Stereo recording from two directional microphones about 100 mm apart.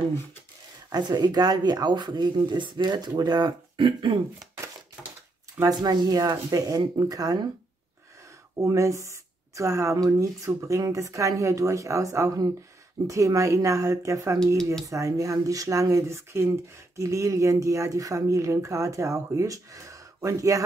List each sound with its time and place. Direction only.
0.9 s speech: 45° right (ahead or behind)
5.0 s a sound: 10° right (ahead or behind)
5.6 s speech: 40° right (ahead or behind)
8.5 s speech: 30° right (ahead or behind)